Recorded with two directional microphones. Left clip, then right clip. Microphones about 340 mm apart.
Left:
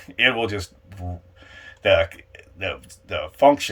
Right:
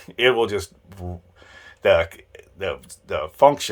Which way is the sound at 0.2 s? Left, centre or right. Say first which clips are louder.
Right 1 dB; centre.